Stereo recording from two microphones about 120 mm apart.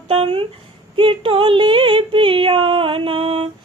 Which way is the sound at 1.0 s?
45° right (ahead or behind).